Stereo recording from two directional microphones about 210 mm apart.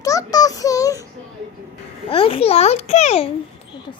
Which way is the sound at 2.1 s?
25° left (ahead or behind).